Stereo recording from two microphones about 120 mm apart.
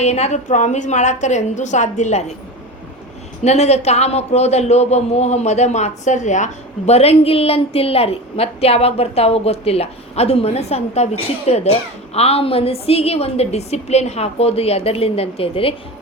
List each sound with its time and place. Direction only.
0.0 s a woman's voice: 65° left (ahead or behind)
3.4 s a man's voice: 65° left (ahead or behind)